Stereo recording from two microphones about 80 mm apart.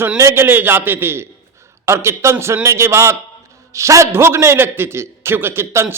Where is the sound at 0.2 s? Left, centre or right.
Right.